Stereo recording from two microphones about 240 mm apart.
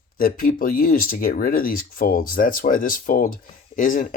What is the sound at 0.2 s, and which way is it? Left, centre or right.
Speech, left.